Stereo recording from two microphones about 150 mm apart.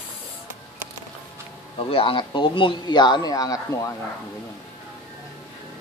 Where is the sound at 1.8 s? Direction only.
35° left (ahead or behind).